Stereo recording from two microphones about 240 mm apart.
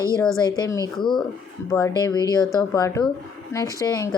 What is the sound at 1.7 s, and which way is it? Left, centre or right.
A woman's voice, centre.